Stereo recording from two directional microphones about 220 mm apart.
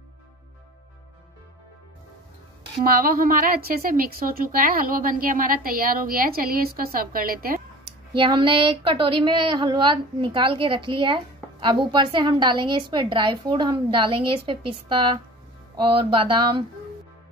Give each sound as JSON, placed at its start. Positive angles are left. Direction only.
{"t": 2.8, "sound": "a woman's voice", "side_deg": -40}
{"t": 7.8, "sound": "speech", "side_deg": -20}